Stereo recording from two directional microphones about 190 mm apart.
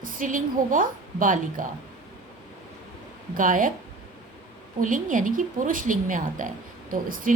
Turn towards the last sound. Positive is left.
turn(degrees=-45)  # may be behind; listen again after turning